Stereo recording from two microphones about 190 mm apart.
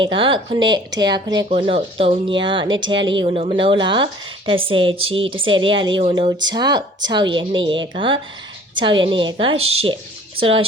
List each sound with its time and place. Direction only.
0.0 s speech: 25° right (ahead or behind)